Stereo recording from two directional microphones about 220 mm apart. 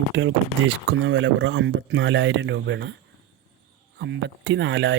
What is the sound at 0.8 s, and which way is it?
Speech, 55° right (ahead or behind).